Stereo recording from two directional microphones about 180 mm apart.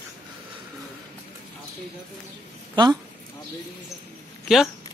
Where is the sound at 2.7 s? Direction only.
25° right (ahead or behind).